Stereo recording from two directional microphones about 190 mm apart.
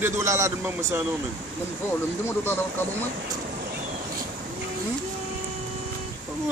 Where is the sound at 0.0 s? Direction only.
15° right (ahead or behind).